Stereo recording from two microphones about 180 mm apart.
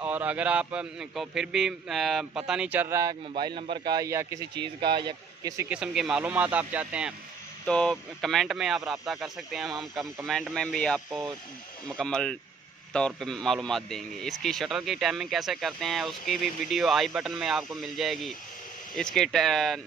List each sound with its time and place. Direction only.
0.0 s a man's voice: 10° right (ahead or behind)
5.7 s a man's voice: 5° right (ahead or behind)
7.6 s a man's voice: 5° left (ahead or behind)
11.1 s a man's voice: 15° right (ahead or behind)
12.0 s a man's voice: 5° left (ahead or behind)